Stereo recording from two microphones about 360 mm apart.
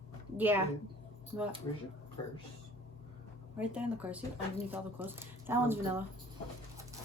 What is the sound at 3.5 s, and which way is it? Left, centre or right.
Speech, centre.